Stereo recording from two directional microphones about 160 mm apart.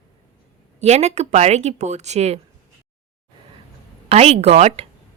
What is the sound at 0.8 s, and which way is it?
Speech, 45° right (ahead or behind).